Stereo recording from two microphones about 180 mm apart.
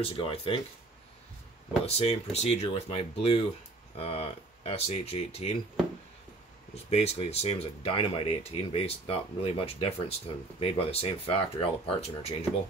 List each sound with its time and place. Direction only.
0.0 s speech: 30° left (ahead or behind)
1.9 s speech: 35° left (ahead or behind)
6.7 s speech: 35° left (ahead or behind)